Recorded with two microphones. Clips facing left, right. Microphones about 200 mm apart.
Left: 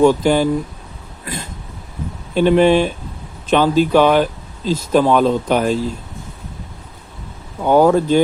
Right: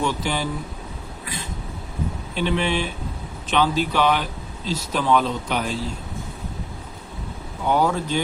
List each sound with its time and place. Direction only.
0.0 s speech: 45° left (ahead or behind)
2.3 s speech: 45° left (ahead or behind)
7.7 s speech: 50° left (ahead or behind)